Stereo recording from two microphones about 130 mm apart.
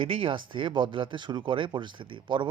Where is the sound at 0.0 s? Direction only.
45° right (ahead or behind).